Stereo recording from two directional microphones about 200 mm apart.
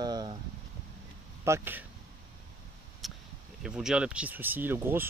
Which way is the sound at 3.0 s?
Centre (ahead or behind).